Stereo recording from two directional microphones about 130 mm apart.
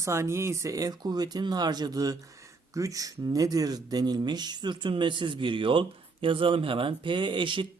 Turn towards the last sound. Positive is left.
turn(degrees=-40)  # may be behind; listen again after turning